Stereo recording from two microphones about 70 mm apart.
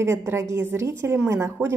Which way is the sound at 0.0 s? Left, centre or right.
Right.